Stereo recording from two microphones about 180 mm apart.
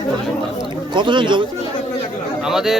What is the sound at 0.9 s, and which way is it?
Speech, 25° right (ahead or behind).